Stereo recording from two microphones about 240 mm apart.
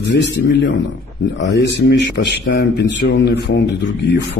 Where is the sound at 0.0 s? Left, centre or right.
Left.